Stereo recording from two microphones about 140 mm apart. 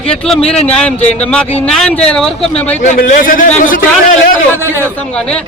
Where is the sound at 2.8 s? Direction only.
75° left (ahead or behind).